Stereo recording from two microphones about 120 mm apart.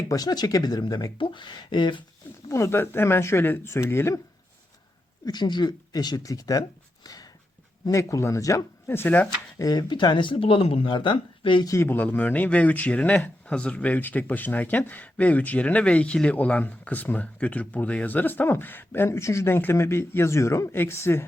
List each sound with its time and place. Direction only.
0.1 s speech: 30° left (ahead or behind)
2.5 s speech: 25° left (ahead or behind)
5.2 s speech: 35° left (ahead or behind); by 9.3 s 15° left (ahead or behind)
9.6 s speech: 35° left (ahead or behind)
11.7 s speech: 20° left (ahead or behind)